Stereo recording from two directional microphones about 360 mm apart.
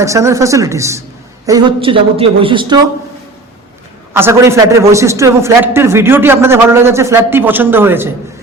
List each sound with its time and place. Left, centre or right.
0.0 s speech: centre
4.1 s speech: centre